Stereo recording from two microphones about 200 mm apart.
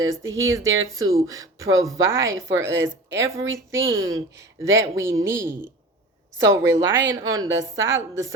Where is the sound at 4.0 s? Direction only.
15° right (ahead or behind).